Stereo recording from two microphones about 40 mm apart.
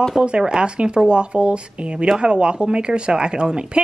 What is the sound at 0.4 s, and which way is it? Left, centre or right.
Speech, centre.